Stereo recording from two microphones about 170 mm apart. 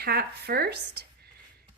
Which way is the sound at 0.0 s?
65° right (ahead or behind).